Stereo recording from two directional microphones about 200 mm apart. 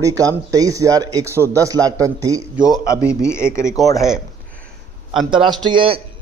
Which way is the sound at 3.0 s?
5° right (ahead or behind).